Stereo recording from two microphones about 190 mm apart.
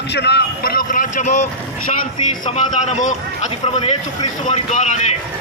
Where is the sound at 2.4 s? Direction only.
35° left (ahead or behind).